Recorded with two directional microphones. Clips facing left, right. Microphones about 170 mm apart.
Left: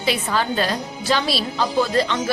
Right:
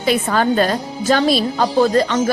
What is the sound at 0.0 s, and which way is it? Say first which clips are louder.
A woman's voice: right 5 dB; 50° right (ahead or behind).